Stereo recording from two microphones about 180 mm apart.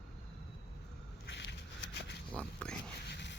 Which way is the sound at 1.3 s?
75° left (ahead or behind).